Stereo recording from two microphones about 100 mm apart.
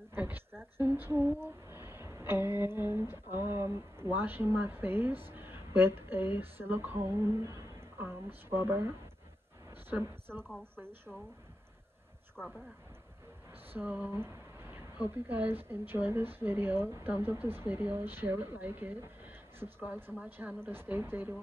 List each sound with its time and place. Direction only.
0.1 s speech: 20° right (ahead or behind)
10.0 s a woman's voice: 25° right (ahead or behind)
12.4 s speech: 5° left (ahead or behind)
13.7 s speech: 15° right (ahead or behind)